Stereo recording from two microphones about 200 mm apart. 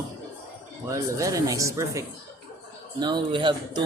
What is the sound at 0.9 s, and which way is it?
A man's voice, 15° right (ahead or behind).